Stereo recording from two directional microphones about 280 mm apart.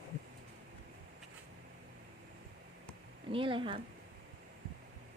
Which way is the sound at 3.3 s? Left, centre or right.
Centre.